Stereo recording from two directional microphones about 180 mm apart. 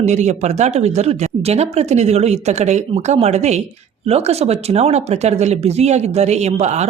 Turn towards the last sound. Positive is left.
turn(degrees=-40)  # may be behind; listen again after turning